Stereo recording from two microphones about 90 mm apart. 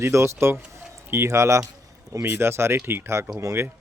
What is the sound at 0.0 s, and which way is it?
Speech, 30° right (ahead or behind).